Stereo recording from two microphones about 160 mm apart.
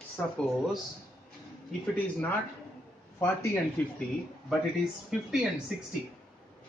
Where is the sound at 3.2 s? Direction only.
15° left (ahead or behind).